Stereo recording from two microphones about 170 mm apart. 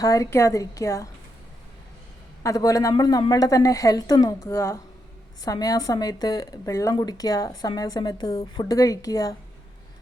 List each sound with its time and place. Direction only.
0.0 s speech: 20° left (ahead or behind)
2.4 s speech: 20° left (ahead or behind)